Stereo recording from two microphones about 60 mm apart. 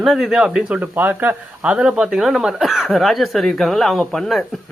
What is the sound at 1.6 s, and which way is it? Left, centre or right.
Speech, centre.